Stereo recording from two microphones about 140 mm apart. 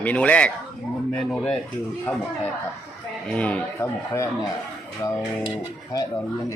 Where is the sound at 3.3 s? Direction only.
10° left (ahead or behind).